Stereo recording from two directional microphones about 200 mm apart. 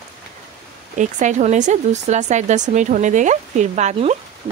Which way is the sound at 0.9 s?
35° right (ahead or behind).